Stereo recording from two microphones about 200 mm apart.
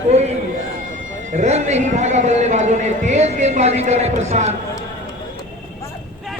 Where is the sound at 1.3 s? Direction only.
35° right (ahead or behind).